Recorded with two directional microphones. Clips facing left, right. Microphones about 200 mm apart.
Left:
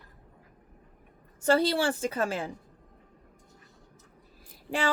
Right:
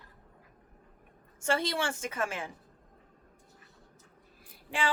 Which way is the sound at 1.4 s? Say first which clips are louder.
Left 7 dB; 35° left (ahead or behind).